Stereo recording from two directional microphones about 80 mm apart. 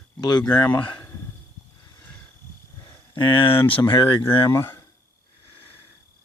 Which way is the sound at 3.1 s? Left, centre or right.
Left.